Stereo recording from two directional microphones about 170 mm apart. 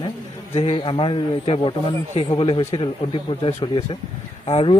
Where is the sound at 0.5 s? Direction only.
35° left (ahead or behind).